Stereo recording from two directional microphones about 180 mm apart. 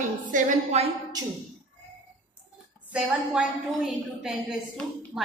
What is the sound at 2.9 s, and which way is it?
A woman's voice, 5° right (ahead or behind).